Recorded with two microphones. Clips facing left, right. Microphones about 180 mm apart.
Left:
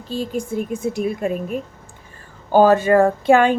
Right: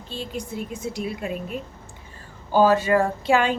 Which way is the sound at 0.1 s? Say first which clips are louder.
Left 8 dB; 45° left (ahead or behind).